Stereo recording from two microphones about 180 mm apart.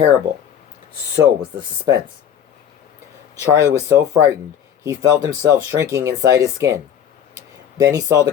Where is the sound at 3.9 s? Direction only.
20° right (ahead or behind).